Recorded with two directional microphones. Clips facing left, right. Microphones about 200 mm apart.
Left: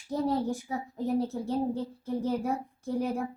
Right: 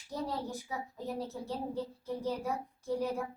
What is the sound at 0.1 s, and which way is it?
A woman's voice, 50° left (ahead or behind).